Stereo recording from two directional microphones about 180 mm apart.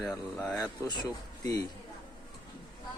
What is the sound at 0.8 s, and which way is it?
Speech, 25° left (ahead or behind).